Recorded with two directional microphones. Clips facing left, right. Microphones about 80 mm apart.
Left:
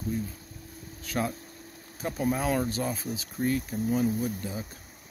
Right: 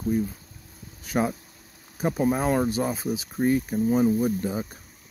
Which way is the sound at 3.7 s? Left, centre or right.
Right.